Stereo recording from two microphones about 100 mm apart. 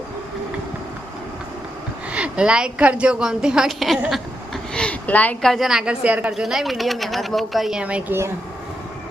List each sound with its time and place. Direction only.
2.1 s a woman's voice: 10° right (ahead or behind)
4.1 s a sound: 5° left (ahead or behind)
5.5 s a woman's voice: 5° right (ahead or behind)
6.3 s a woman's voice: 5° right (ahead or behind)